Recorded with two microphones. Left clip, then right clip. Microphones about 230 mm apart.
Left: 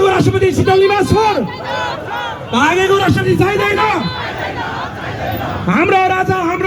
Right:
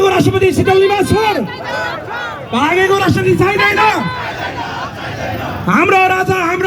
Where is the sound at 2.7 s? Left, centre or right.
Centre.